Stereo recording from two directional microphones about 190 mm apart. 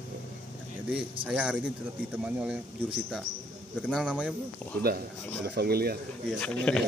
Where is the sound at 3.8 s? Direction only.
5° right (ahead or behind).